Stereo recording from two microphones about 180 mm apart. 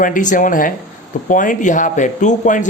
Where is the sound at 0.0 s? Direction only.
45° left (ahead or behind).